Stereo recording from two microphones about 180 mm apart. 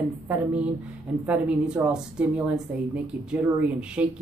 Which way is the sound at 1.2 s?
10° right (ahead or behind).